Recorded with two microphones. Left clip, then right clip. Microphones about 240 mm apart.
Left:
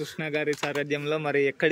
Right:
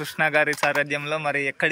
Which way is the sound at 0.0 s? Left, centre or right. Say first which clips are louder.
Right 8 dB; centre.